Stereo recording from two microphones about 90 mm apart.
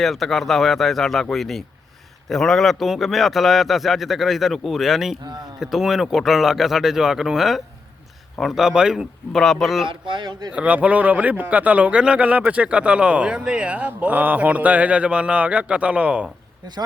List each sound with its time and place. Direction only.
0.0 s a man's voice: centre (ahead or behind)
5.2 s speech: 55° right (ahead or behind)
5.5 s a man's voice: 5° right (ahead or behind)
9.9 s speech: 60° right (ahead or behind)
10.5 s a man's voice: 15° right (ahead or behind)